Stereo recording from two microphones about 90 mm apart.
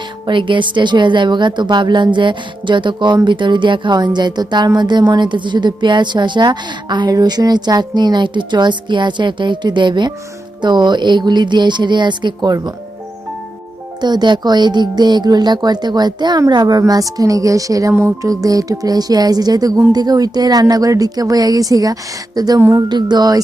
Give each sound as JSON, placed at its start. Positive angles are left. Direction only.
{"t": 0.3, "sound": "speech", "side_deg": -65}
{"t": 14.0, "sound": "a woman's voice", "side_deg": -50}